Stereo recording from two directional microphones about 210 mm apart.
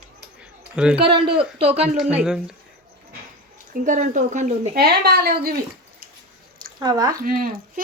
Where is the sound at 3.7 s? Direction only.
40° right (ahead or behind).